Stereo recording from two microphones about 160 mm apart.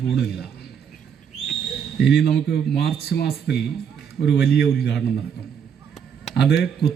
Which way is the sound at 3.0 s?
80° left.